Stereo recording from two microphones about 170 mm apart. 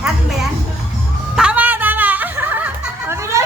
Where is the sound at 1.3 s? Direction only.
5° right (ahead or behind).